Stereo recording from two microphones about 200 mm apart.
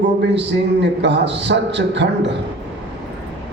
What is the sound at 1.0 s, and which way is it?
A man's voice, 60° right (ahead or behind).